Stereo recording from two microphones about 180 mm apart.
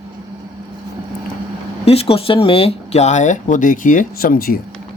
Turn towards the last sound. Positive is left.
turn(degrees=55)  # may be behind; listen again after turning